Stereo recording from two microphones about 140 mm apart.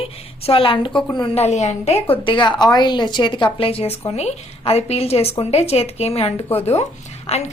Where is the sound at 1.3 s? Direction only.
50° left (ahead or behind).